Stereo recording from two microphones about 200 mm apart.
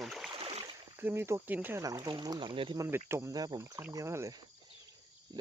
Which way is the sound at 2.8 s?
10° right (ahead or behind).